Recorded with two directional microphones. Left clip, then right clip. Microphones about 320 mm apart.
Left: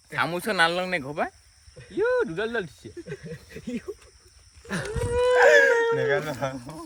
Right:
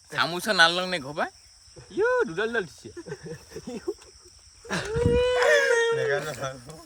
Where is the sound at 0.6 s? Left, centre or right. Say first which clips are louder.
Right 2 dB; centre.